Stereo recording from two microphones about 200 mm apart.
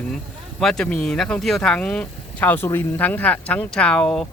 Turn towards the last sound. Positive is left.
turn(degrees=5)  # may be behind; listen again after turning